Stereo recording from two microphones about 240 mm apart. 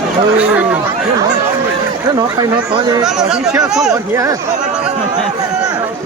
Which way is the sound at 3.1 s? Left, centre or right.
Centre.